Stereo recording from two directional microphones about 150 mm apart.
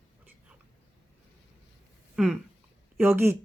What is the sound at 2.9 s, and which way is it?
Speech, 15° right (ahead or behind).